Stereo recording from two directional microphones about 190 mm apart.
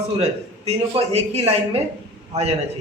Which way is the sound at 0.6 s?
35° right (ahead or behind).